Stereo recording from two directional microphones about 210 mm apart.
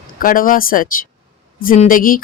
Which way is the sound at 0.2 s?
40° left (ahead or behind).